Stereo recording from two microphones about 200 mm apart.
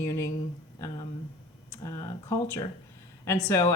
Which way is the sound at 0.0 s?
15° left (ahead or behind).